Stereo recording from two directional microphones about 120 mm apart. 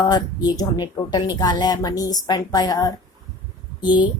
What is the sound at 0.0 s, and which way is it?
Speech, 35° left (ahead or behind).